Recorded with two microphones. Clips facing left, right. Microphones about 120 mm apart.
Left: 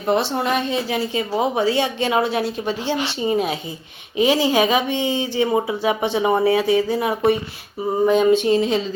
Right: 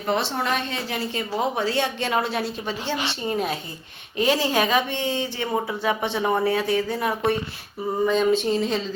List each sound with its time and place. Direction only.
0.0 s a woman's voice: 10° left (ahead or behind)